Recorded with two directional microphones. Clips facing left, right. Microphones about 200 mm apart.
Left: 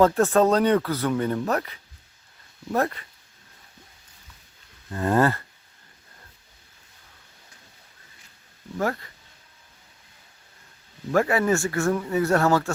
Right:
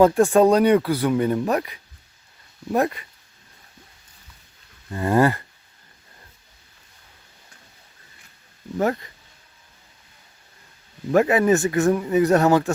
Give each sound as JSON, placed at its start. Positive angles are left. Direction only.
{"t": 0.0, "sound": "speech", "side_deg": -15}
{"t": 4.9, "sound": "speech", "side_deg": -10}
{"t": 8.8, "sound": "speech", "side_deg": -20}
{"t": 11.1, "sound": "speech", "side_deg": -20}